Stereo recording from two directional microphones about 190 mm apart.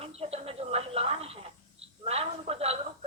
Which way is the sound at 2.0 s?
30° right (ahead or behind).